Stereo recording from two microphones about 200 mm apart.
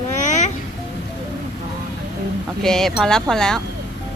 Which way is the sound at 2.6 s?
Centre (ahead or behind).